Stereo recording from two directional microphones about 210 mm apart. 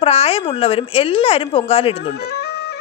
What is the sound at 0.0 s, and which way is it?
A woman's voice, 30° left (ahead or behind).